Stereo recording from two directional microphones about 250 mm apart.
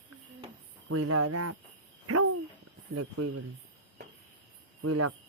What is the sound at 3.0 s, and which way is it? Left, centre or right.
Speech, right.